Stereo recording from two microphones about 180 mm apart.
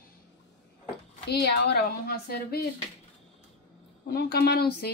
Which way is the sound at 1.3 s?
65° left (ahead or behind).